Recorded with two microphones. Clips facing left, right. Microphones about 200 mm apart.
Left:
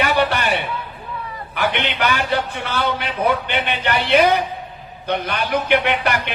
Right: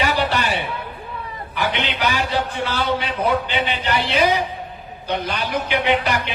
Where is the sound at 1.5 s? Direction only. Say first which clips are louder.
Left 2 dB; 55° left (ahead or behind).